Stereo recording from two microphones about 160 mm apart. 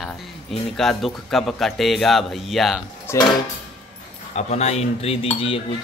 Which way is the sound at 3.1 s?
15° left (ahead or behind).